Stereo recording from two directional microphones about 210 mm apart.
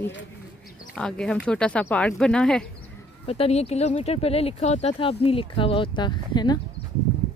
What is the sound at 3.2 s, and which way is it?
Speech, 30° left (ahead or behind).